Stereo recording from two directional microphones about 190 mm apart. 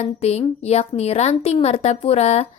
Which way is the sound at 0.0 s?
35° left (ahead or behind).